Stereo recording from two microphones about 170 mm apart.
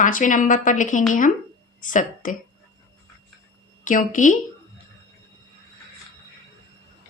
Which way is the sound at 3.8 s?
50° left (ahead or behind).